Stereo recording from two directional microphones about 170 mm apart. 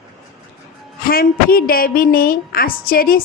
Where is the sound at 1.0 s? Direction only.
60° left (ahead or behind).